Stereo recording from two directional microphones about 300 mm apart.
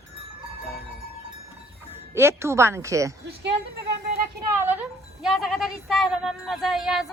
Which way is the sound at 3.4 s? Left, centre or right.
Right.